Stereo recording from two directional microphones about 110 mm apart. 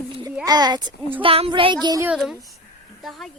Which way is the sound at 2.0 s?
5° right (ahead or behind).